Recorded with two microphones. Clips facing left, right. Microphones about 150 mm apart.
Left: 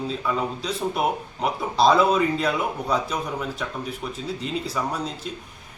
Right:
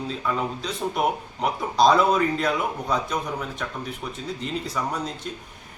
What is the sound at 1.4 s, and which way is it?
Speech, 5° left (ahead or behind).